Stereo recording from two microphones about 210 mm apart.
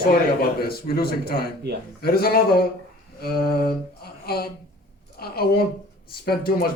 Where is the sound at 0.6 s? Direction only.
45° left (ahead or behind).